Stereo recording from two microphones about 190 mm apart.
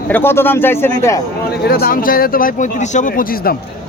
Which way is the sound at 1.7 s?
50° left (ahead or behind).